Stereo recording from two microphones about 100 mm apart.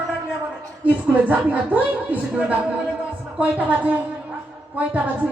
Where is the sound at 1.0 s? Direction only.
15° right (ahead or behind).